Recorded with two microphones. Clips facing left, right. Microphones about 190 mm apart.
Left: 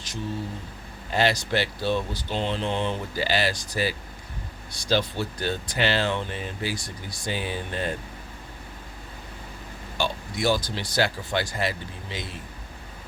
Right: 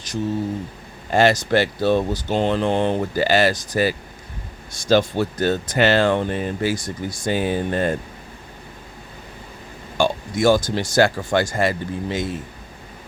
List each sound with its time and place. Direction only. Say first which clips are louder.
1.1 s speech: right 7 dB; 50° right (ahead or behind)
10.0 s speech: right 8 dB; 50° right (ahead or behind)